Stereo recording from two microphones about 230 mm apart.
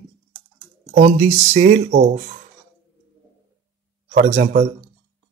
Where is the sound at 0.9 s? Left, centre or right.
Right.